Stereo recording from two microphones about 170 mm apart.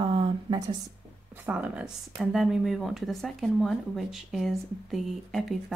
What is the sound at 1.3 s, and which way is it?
Speech, 10° right (ahead or behind).